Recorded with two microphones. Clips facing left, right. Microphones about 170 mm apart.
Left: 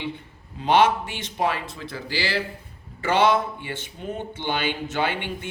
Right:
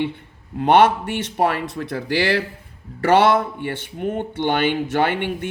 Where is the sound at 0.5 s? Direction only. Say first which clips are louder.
Right 4 dB; 60° right (ahead or behind).